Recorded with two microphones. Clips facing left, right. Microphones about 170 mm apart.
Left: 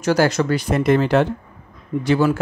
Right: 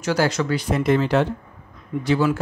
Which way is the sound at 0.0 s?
45° left (ahead or behind).